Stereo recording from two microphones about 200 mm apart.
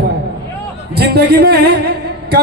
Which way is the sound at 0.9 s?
50° right (ahead or behind).